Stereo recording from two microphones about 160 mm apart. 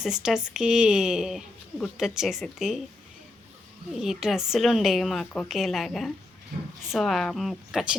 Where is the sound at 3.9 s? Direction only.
5° right (ahead or behind).